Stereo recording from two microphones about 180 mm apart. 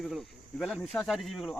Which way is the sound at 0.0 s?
Centre (ahead or behind).